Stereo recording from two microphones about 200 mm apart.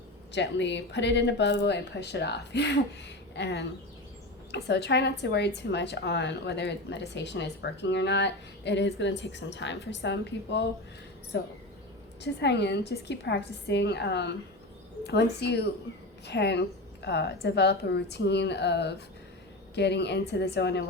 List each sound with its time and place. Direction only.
0.3 s a woman's voice: 60° left (ahead or behind)